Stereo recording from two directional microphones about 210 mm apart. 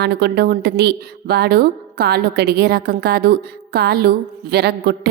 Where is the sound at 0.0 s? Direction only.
50° right (ahead or behind).